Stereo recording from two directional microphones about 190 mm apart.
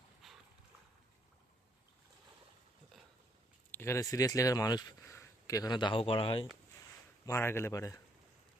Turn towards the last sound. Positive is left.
turn(degrees=15)  # may be behind; listen again after turning